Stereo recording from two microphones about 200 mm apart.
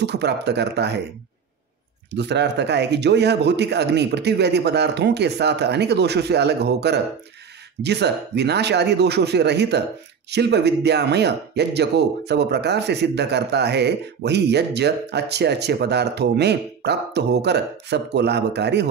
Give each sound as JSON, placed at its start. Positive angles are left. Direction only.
{"t": 0.0, "sound": "speech", "side_deg": -55}
{"t": 2.0, "sound": "speech", "side_deg": -60}